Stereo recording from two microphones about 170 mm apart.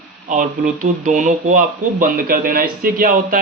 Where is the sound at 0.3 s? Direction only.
50° right (ahead or behind).